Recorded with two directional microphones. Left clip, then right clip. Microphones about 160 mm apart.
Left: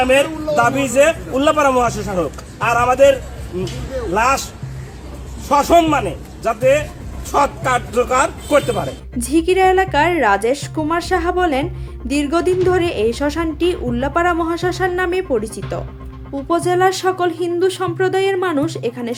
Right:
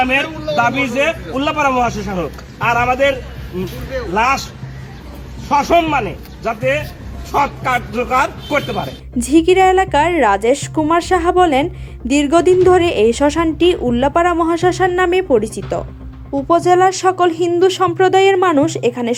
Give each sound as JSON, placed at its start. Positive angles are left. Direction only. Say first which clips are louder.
{"t": 0.0, "sound": "a man's voice", "louder": "left 2 dB", "side_deg": 30}
{"t": 5.9, "sound": "a man's voice", "louder": "even", "side_deg": 35}
{"t": 9.1, "sound": "a woman's voice", "louder": "right 4 dB", "side_deg": -20}